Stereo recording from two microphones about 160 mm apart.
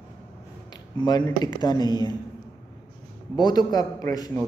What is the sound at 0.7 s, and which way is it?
A man's voice, 25° left (ahead or behind).